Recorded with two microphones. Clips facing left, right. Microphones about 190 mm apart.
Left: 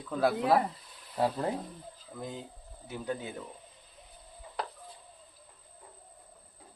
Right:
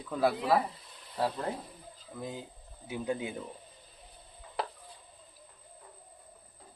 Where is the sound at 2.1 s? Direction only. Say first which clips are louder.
Even; centre (ahead or behind).